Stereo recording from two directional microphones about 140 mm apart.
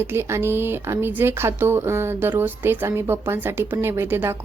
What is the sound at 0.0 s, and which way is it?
Speech, 15° right (ahead or behind).